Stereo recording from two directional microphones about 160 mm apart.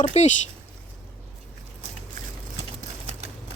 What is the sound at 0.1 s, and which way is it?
Speech, 45° left (ahead or behind).